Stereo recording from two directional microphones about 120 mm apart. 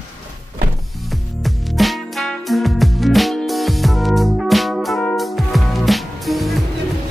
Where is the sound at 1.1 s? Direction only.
Centre (ahead or behind).